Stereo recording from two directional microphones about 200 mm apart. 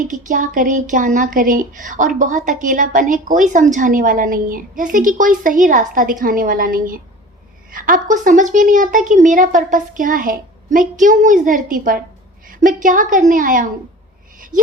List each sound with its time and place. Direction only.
0.0 s speech: 40° right (ahead or behind)
14.5 s speech: 20° right (ahead or behind)